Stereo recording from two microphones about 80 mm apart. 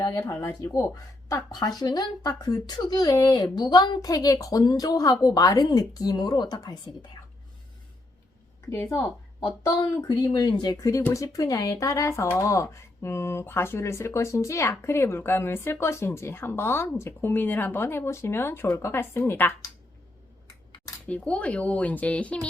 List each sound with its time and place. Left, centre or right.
0.3 s speech: left
1.5 s speech: left
10.3 s speech: left
21.1 s speech: centre